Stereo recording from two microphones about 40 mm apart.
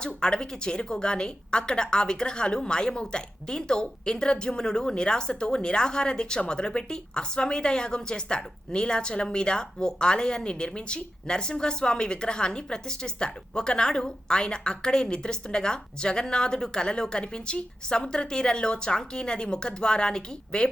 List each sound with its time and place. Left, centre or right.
0.0 s a woman's voice: left